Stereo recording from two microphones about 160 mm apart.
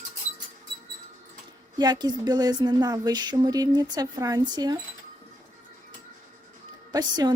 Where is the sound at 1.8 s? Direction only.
25° right (ahead or behind).